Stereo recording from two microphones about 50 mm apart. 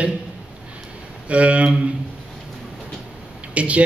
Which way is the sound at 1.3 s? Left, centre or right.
Right.